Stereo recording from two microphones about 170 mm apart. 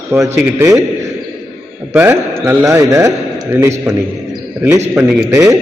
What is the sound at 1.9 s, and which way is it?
A man's voice, 15° right (ahead or behind).